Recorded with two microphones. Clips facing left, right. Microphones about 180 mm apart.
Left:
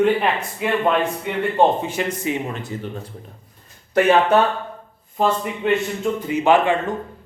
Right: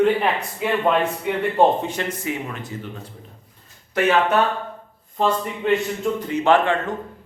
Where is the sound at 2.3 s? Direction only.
25° left (ahead or behind).